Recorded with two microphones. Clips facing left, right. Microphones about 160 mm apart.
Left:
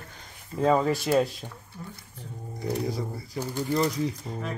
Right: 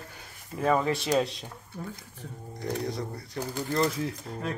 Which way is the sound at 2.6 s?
5° left (ahead or behind).